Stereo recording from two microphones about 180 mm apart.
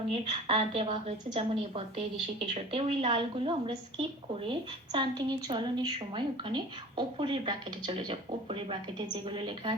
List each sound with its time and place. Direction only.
0.1 s a woman's voice: 35° right (ahead or behind)